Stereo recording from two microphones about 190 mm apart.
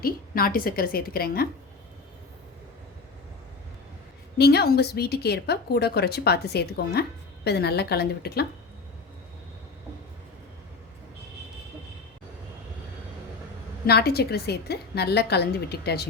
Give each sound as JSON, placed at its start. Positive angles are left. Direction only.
{"t": 0.0, "sound": "a woman's voice", "side_deg": 50}
{"t": 4.4, "sound": "a woman's voice", "side_deg": 55}
{"t": 13.8, "sound": "a woman's voice", "side_deg": 55}